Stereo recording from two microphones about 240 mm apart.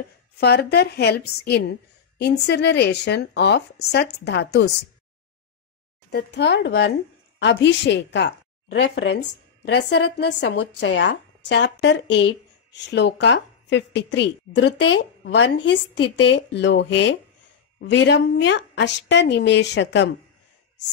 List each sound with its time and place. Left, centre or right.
0.4 s a woman's voice: left
6.0 s a woman's voice: left